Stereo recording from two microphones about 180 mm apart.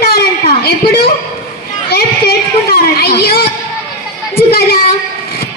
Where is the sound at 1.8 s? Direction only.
60° left (ahead or behind).